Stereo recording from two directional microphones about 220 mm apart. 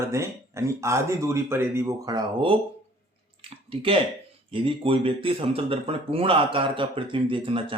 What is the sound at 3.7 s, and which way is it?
Speech, 25° right (ahead or behind).